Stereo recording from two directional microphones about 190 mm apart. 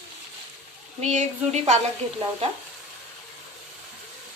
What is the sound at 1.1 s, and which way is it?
Speech, 40° right (ahead or behind).